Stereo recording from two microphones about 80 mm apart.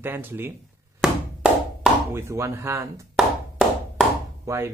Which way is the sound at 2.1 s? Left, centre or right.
Right.